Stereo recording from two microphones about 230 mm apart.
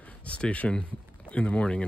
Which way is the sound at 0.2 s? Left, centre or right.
Centre.